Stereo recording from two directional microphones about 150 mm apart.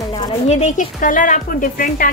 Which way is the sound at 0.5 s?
50° left (ahead or behind).